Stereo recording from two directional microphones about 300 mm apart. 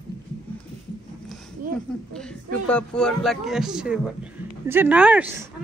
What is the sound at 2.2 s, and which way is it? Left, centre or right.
Speech, centre.